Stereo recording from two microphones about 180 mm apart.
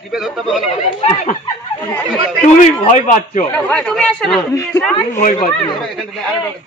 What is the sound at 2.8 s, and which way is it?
Speech, 50° left (ahead or behind).